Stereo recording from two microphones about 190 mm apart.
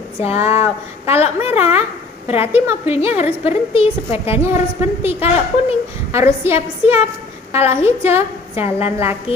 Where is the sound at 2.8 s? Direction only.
30° left (ahead or behind).